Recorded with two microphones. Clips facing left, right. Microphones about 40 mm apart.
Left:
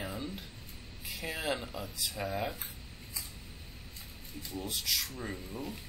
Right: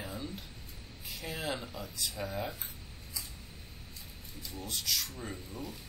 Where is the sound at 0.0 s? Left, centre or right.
Centre.